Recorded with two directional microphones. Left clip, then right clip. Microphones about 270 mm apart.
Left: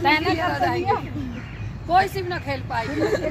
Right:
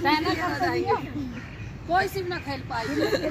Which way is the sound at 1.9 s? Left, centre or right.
Left.